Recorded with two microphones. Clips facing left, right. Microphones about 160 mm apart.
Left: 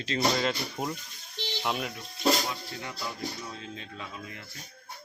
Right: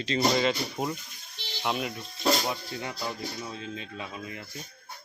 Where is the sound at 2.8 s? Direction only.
20° right (ahead or behind).